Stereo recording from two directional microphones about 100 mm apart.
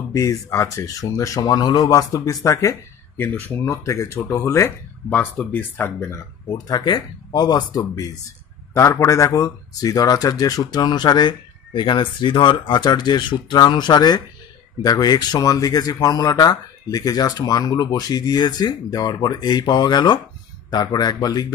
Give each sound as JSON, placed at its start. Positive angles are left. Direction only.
{"t": 0.1, "sound": "speech", "side_deg": 30}
{"t": 5.1, "sound": "speech", "side_deg": 15}
{"t": 6.7, "sound": "speech", "side_deg": 45}